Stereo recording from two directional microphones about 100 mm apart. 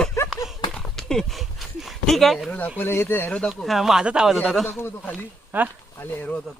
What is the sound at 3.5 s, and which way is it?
Speech, centre (ahead or behind).